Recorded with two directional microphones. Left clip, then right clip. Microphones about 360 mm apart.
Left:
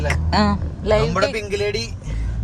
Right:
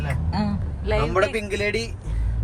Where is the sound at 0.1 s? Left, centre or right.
Left.